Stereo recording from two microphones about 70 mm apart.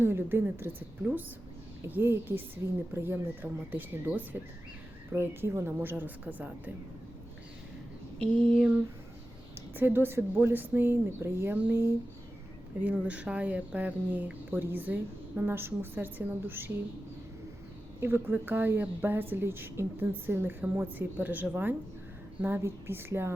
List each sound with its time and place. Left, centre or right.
0.0 s speech: right
5.1 s speech: right
9.7 s speech: right
12.8 s speech: centre
18.0 s speech: right